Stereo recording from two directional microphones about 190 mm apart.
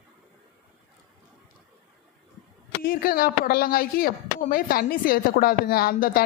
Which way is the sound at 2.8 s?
50° left (ahead or behind).